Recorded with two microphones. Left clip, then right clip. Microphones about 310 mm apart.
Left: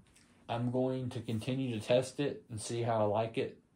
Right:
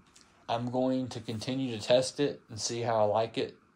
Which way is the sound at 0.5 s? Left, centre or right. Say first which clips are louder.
Right 4 dB; right.